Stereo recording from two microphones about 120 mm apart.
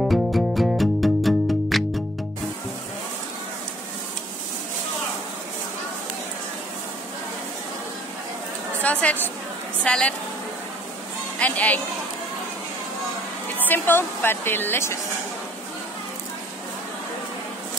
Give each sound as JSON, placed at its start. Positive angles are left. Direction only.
{"t": 0.0, "sound": "music", "side_deg": 0}
{"t": 8.8, "sound": "a woman's voice", "side_deg": 15}
{"t": 11.3, "sound": "speech", "side_deg": 10}
{"t": 13.7, "sound": "a woman's voice", "side_deg": 20}